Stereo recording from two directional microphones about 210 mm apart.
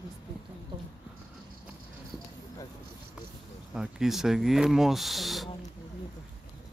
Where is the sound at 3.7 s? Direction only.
5° right (ahead or behind).